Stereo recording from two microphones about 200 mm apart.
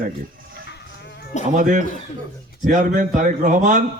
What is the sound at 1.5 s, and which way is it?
A man's voice, 40° right (ahead or behind).